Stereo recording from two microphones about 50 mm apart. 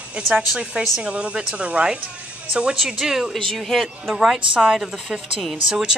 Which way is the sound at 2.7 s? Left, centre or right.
Centre.